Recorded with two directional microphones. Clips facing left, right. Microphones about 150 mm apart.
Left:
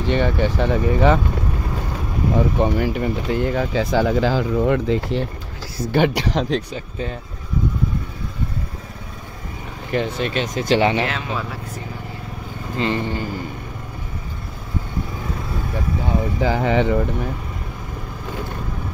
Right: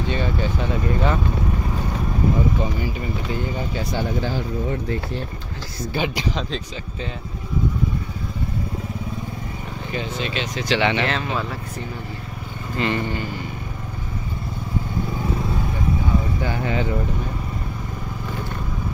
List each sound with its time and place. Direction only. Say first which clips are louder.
0.0 s speech: left 5 dB; 75° left (ahead or behind)
2.6 s speech: left 6 dB; 65° left (ahead or behind); by 5.2 s 90° left
5.9 s speech: left 6 dB; 65° left (ahead or behind)
9.9 s speech: left 6 dB; 65° left (ahead or behind); by 11.1 s 40° left (ahead or behind)
11.1 s speech: right 1 dB; 5° left (ahead or behind)
12.7 s a man's voice: left 1 dB; 25° left (ahead or behind)
16.3 s speech: left 6 dB; 90° left